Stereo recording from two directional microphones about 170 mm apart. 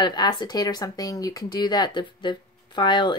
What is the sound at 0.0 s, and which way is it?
Speech, 25° left (ahead or behind).